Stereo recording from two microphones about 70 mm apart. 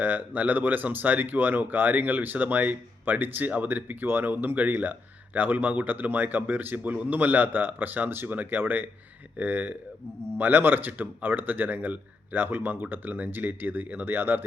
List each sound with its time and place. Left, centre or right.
0.0 s speech: right